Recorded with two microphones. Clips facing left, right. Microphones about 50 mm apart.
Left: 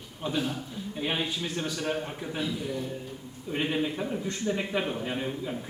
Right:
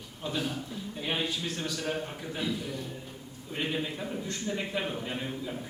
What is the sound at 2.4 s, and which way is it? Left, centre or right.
A man's voice, centre.